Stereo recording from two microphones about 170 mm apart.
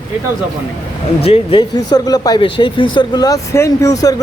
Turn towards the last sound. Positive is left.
turn(degrees=20)  # may be behind; listen again after turning